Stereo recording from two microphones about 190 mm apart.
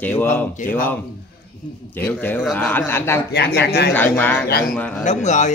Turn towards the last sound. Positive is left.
turn(degrees=40)  # may be behind; listen again after turning